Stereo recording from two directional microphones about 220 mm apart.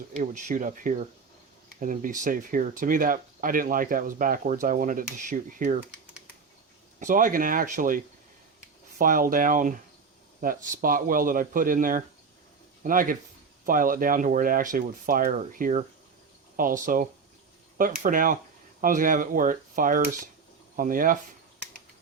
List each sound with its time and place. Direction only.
0.2 s speech: 35° right (ahead or behind)
7.0 s speech: 35° right (ahead or behind)